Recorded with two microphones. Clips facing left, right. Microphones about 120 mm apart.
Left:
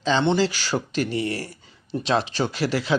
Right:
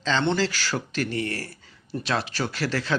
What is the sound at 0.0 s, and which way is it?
Speech, 15° left (ahead or behind).